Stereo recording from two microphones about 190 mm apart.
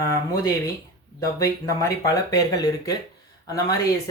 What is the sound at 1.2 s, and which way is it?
Speech, 15° left (ahead or behind).